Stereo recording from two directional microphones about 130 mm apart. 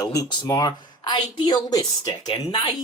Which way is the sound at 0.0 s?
30° left (ahead or behind).